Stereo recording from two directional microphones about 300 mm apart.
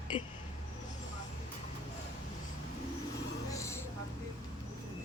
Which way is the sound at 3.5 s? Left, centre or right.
Centre.